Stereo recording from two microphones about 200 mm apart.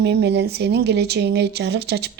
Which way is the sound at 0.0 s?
55° right (ahead or behind).